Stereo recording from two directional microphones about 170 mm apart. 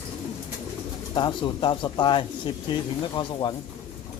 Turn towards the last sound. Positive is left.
turn(degrees=25)  # may be behind; listen again after turning